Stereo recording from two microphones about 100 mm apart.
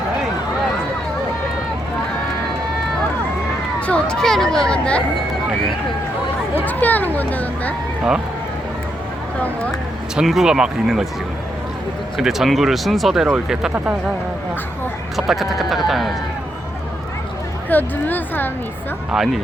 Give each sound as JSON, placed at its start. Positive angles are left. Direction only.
{"t": 3.8, "sound": "speech", "side_deg": 10}
{"t": 6.7, "sound": "speech", "side_deg": 15}
{"t": 10.2, "sound": "speech", "side_deg": -5}
{"t": 12.1, "sound": "speech", "side_deg": -5}
{"t": 15.1, "sound": "speech", "side_deg": 0}
{"t": 17.7, "sound": "a woman's voice", "side_deg": 20}
{"t": 19.1, "sound": "speech", "side_deg": -5}